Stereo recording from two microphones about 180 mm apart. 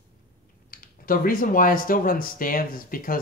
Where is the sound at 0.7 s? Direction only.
50° left (ahead or behind).